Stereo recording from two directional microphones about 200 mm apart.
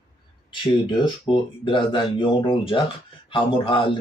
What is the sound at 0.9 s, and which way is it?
Speech, 25° left (ahead or behind).